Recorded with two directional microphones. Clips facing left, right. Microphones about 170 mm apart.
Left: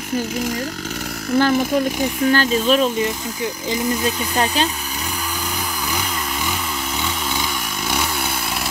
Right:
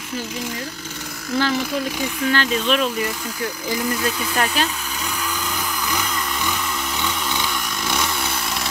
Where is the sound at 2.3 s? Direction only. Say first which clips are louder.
Left 3 dB; 40° left (ahead or behind).